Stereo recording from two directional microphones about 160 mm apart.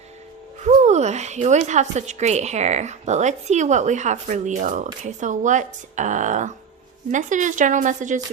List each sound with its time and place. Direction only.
0.6 s speech: 45° right (ahead or behind)